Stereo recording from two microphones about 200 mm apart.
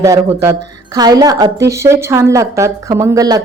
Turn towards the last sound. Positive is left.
turn(degrees=-15)  # may be behind; listen again after turning